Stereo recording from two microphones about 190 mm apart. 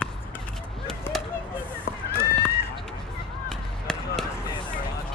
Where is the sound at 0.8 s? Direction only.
5° left (ahead or behind).